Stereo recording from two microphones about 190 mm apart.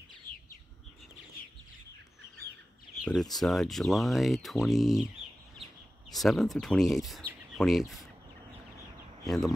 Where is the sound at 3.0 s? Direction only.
Centre (ahead or behind).